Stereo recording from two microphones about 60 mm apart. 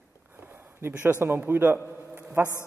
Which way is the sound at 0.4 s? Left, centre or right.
Right.